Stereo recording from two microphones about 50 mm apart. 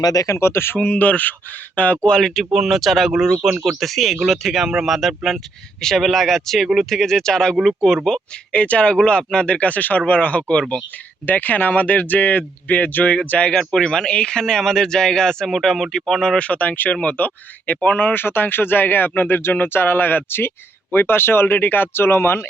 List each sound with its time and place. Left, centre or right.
0.3 s speech: left
0.9 s speech: left
2.2 s speech: centre
8.5 s speech: left
13.7 s speech: centre
15.4 s speech: centre
16.4 s speech: left